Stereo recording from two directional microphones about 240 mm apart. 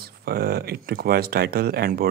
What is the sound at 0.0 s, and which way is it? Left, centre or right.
Speech, right.